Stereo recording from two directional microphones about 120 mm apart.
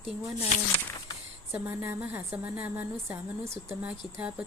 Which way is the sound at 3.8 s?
10° right (ahead or behind).